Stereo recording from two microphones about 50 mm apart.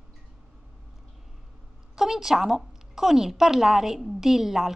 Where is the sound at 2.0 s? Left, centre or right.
Centre.